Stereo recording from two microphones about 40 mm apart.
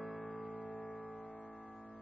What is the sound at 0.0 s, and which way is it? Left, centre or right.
Music, centre.